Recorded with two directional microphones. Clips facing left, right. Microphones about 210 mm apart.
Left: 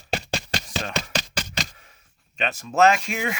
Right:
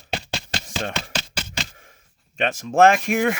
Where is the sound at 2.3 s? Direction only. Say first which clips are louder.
Right 4 dB; 50° right (ahead or behind).